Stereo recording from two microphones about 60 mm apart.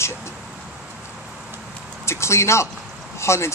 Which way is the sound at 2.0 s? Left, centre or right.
Left.